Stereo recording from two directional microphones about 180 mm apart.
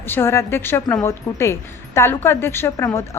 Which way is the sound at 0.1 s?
15° left (ahead or behind).